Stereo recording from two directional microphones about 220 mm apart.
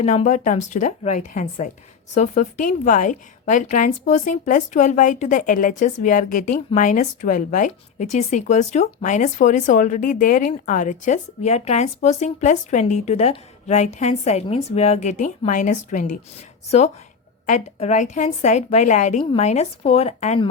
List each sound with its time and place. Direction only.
0.0 s a woman's voice: 30° left (ahead or behind)
17.5 s a woman's voice: 35° left (ahead or behind)